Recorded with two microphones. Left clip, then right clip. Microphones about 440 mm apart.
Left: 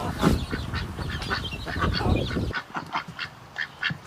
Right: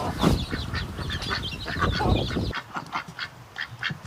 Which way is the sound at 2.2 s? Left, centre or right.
Centre.